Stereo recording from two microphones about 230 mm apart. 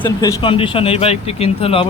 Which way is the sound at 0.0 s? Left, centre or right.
Centre.